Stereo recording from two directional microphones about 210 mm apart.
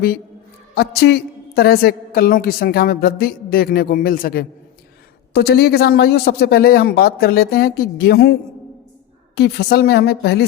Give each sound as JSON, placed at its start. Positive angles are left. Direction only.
{"t": 0.8, "sound": "a woman's voice", "side_deg": 50}